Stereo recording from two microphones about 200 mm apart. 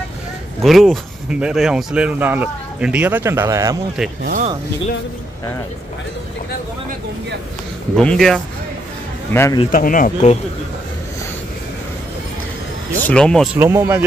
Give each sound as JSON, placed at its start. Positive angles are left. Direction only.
{"t": 0.6, "sound": "speech", "side_deg": 0}
{"t": 4.2, "sound": "speech", "side_deg": -40}
{"t": 7.9, "sound": "a man's voice", "side_deg": 5}
{"t": 9.7, "sound": "speech", "side_deg": 40}
{"t": 13.0, "sound": "speech", "side_deg": 5}
{"t": 13.6, "sound": "speech", "side_deg": -10}